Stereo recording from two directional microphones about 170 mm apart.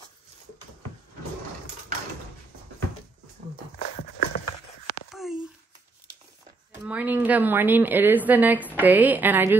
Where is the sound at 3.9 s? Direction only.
55° left (ahead or behind).